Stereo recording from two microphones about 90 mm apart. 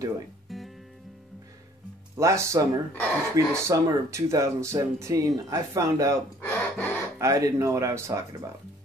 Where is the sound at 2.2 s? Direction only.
35° right (ahead or behind).